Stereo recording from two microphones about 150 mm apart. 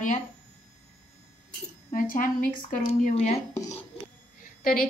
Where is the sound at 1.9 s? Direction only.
70° left (ahead or behind).